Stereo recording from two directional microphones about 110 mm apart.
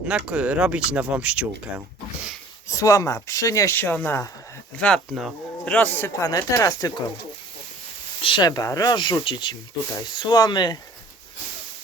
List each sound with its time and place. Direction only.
0.1 s speech: 10° right (ahead or behind)
2.6 s speech: 30° left (ahead or behind)
3.8 s speech: 20° left (ahead or behind); by 7.0 s 35° left (ahead or behind)
8.2 s speech: 50° left (ahead or behind)
8.4 s speech: 35° left (ahead or behind)